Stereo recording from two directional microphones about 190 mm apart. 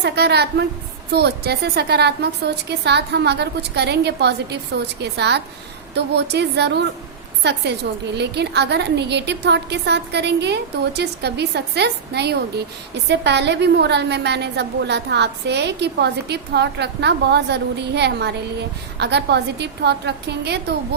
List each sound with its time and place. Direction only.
0.0 s a woman's voice: 60° right (ahead or behind)